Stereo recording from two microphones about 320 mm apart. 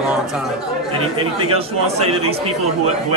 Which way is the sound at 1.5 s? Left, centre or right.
Centre.